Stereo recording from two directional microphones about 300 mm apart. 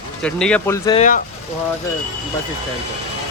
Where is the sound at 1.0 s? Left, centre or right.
Left.